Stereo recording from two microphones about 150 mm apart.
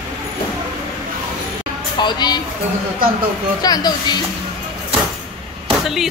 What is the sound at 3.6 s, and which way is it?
Speech, 25° left (ahead or behind).